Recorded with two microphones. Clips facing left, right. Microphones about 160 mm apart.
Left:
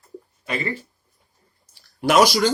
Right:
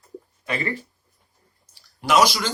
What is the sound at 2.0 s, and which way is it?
Speech, 45° left (ahead or behind).